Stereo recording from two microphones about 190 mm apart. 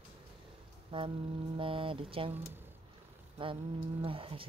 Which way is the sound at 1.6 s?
30° right (ahead or behind).